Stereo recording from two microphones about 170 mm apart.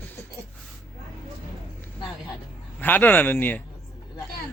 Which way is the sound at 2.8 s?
10° left (ahead or behind).